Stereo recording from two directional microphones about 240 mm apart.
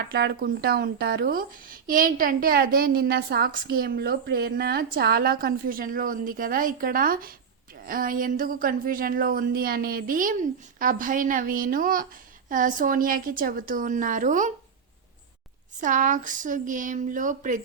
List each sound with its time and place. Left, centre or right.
0.1 s a woman's voice: right
15.8 s a woman's voice: right